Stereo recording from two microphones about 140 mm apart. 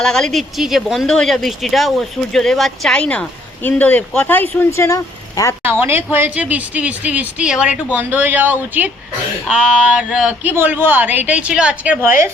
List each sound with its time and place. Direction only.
0.0 s speech: 5° left (ahead or behind); by 5.5 s 25° left (ahead or behind)
5.8 s speech: 15° right (ahead or behind)